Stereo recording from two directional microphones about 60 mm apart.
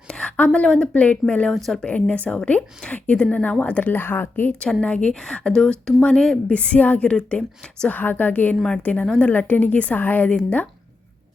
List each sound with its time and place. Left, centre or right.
0.1 s a woman's voice: centre
1.5 s speech: centre
1.8 s speech: left
4.6 s speech: centre
5.1 s speech: centre
7.9 s speech: left